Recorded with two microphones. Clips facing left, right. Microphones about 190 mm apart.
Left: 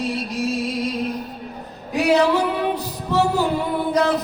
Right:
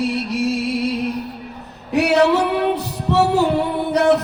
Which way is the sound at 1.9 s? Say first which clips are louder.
Right 2 dB; 70° right (ahead or behind).